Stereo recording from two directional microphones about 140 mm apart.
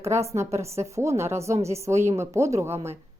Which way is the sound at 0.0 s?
20° right (ahead or behind).